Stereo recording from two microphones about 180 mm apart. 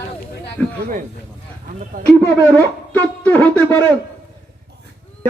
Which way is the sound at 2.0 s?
50° right (ahead or behind).